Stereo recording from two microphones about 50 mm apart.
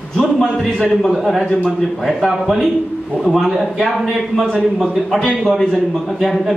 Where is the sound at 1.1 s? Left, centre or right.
Centre.